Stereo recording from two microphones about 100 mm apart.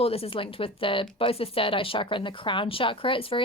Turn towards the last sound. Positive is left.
turn(degrees=60)  # may be behind; listen again after turning